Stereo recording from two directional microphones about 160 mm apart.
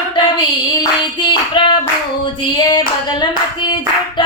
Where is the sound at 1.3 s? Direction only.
30° left (ahead or behind).